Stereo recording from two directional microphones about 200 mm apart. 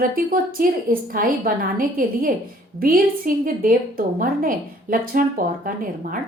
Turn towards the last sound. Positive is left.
turn(degrees=-45)  # may be behind; listen again after turning